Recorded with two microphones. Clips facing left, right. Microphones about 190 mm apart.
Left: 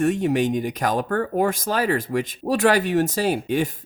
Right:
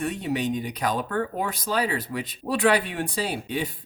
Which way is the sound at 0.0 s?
45° left (ahead or behind).